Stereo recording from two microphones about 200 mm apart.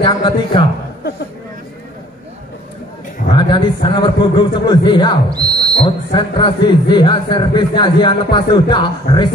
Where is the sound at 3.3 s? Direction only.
25° left (ahead or behind).